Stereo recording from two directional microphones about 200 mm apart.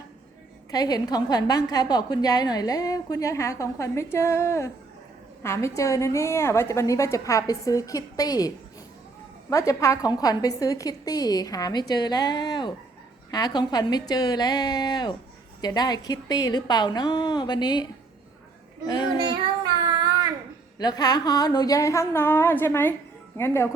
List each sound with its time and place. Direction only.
0.7 s a woman's voice: 20° left (ahead or behind)
18.9 s a woman's voice: 20° left (ahead or behind)
19.8 s a sound: 20° right (ahead or behind)
20.7 s a woman's voice: 20° left (ahead or behind)